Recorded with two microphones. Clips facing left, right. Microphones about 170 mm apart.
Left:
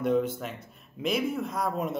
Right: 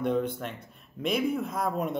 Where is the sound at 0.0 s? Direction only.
5° left (ahead or behind).